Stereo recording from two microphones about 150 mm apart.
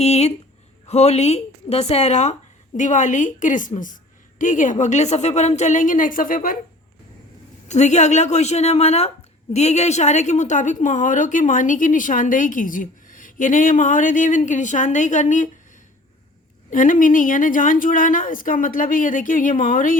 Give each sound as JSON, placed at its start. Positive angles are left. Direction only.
{"t": 0.0, "sound": "speech", "side_deg": 45}
{"t": 7.7, "sound": "speech", "side_deg": 50}
{"t": 16.6, "sound": "speech", "side_deg": 65}